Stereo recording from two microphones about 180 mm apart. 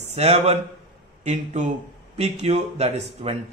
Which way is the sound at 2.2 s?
35° right (ahead or behind).